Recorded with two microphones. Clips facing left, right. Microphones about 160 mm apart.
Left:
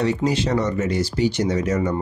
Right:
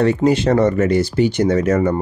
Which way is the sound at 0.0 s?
55° right (ahead or behind).